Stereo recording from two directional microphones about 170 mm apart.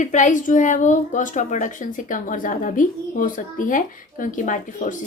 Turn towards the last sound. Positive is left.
turn(degrees=50)  # may be behind; listen again after turning